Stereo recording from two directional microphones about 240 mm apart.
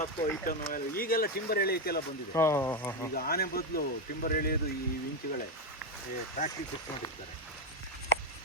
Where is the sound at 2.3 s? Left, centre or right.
Centre.